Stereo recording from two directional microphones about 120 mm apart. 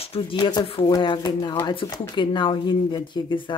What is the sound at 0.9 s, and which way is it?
Speech, 40° left (ahead or behind).